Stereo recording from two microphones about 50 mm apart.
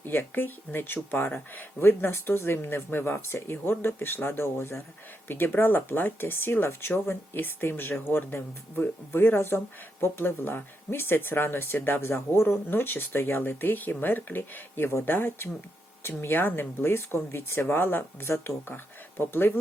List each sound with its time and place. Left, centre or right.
0.0 s speech: left
5.3 s speech: left